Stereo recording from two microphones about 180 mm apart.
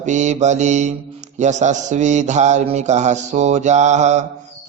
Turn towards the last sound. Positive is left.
turn(degrees=-40)  # may be behind; listen again after turning